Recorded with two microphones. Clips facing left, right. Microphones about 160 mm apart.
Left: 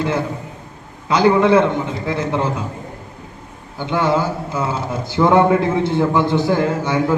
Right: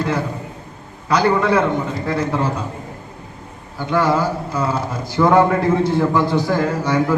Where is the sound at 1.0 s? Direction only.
25° left (ahead or behind).